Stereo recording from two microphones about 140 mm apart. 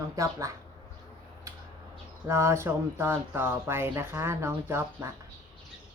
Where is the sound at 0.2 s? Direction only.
25° right (ahead or behind).